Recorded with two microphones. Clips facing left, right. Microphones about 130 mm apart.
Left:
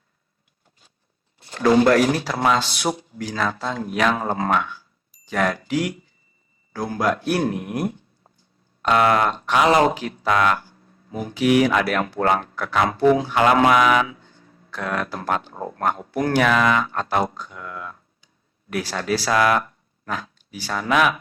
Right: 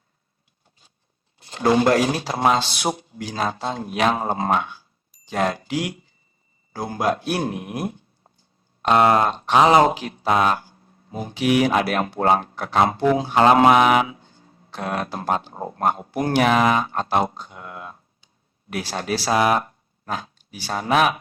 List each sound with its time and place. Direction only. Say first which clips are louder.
1.4 s speech: left 2 dB; 25° right (ahead or behind)